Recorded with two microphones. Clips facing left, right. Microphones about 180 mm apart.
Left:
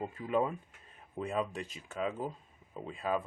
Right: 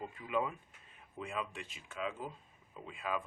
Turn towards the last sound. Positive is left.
turn(degrees=35)  # may be behind; listen again after turning